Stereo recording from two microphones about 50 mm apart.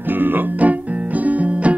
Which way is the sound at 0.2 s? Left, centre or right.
Right.